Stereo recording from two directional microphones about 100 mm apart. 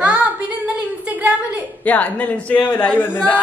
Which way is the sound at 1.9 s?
15° left (ahead or behind).